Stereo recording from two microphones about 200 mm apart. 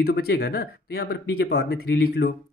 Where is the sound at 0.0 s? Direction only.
50° left (ahead or behind).